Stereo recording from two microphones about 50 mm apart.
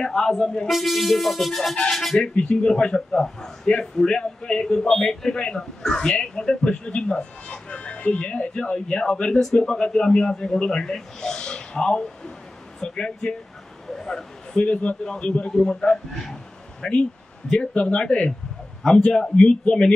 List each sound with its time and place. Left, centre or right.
0.0 s speech: centre
0.7 s speech: centre
2.3 s speech: left
13.8 s a sound: centre
14.7 s speech: left; by 16.3 s centre
16.8 s speech: centre